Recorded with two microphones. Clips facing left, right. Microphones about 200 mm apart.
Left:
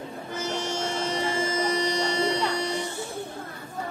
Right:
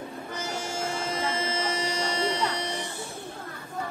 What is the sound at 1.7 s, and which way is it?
Music, 35° left (ahead or behind).